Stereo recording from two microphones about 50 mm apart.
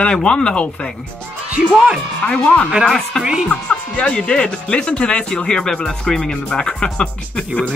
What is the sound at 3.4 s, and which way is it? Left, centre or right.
Speech, left.